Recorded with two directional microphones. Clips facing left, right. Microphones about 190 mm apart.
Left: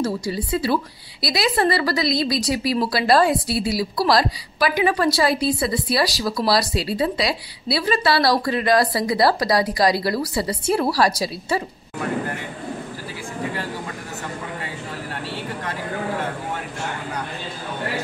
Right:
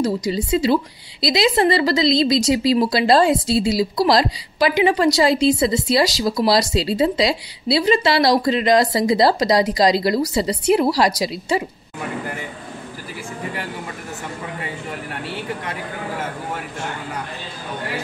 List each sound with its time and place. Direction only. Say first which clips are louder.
0.0 s a woman's voice: right 3 dB; 20° right (ahead or behind)